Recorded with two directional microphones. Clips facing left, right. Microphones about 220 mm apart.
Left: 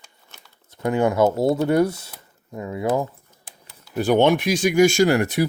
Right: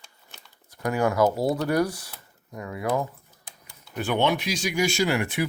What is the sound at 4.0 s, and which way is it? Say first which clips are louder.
Speech: left 7 dB; 40° left (ahead or behind).